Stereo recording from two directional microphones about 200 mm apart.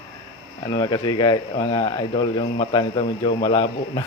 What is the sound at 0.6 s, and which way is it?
Speech, 20° left (ahead or behind).